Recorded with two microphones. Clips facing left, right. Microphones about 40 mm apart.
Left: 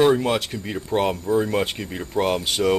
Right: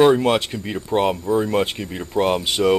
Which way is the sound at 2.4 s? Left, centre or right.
Right.